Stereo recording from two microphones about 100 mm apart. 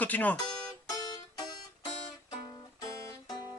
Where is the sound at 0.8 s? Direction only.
40° left (ahead or behind).